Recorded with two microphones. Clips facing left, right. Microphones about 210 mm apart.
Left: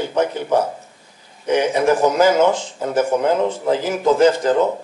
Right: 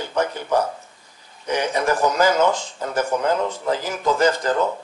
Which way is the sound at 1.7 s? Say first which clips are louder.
Left 2 dB; 10° left (ahead or behind).